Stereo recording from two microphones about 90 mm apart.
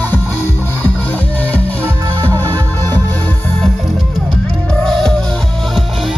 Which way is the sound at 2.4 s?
20° left (ahead or behind).